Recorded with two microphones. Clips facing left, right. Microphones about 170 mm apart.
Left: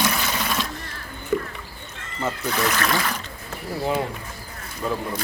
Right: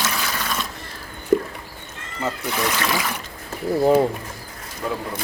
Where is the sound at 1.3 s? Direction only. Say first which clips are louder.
Right 5 dB; 45° right (ahead or behind).